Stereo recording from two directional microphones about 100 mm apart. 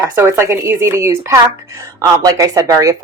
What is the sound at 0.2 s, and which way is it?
A woman's voice, 25° right (ahead or behind).